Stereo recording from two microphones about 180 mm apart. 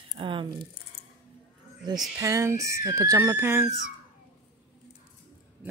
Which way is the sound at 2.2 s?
15° right (ahead or behind).